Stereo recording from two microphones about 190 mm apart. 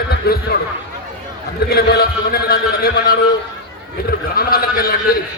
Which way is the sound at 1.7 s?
55° left (ahead or behind).